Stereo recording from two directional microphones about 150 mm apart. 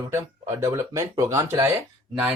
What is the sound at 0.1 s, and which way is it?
Speech, 20° right (ahead or behind).